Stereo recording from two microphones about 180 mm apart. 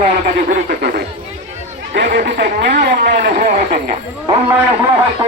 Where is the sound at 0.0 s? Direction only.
55° right (ahead or behind).